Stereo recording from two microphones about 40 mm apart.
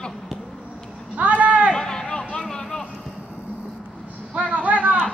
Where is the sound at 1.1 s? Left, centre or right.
Right.